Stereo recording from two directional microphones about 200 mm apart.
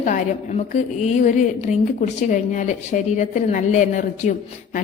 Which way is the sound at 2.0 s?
40° left (ahead or behind).